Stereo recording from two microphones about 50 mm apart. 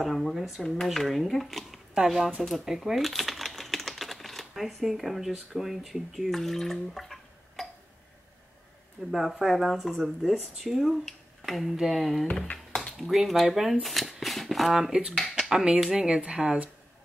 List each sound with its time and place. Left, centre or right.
0.0 s speech: centre
9.1 s speech: centre
11.1 s finger snapping: centre
11.7 s speech: centre
13.8 s shuffling cards: centre
14.9 s speech: centre
15.3 s a sound: centre
15.9 s speech: centre